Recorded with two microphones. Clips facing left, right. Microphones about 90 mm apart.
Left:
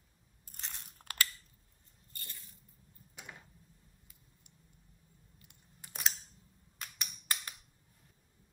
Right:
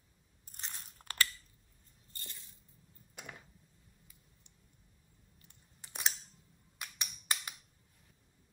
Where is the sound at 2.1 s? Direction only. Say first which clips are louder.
Even; 20° right (ahead or behind).